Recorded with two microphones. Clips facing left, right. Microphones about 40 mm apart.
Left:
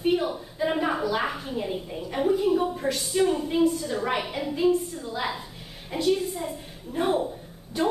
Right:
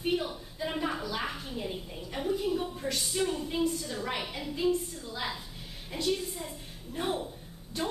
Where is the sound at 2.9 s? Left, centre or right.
Centre.